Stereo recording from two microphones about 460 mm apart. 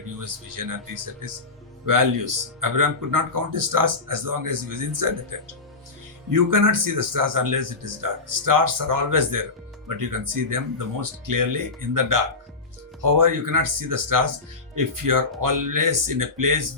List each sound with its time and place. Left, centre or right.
0.3 s speech: right
6.3 s speech: right